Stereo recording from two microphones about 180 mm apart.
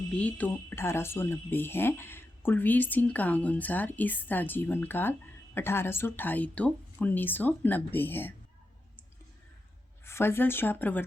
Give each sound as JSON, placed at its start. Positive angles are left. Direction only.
{"t": 0.1, "sound": "speech", "side_deg": 5}
{"t": 10.0, "sound": "speech", "side_deg": 15}